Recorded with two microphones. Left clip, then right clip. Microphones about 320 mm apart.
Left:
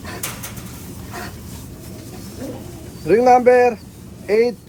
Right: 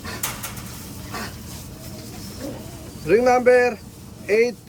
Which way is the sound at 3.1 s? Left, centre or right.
Centre.